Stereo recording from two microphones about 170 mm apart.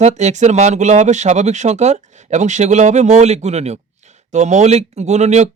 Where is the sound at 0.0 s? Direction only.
40° right (ahead or behind).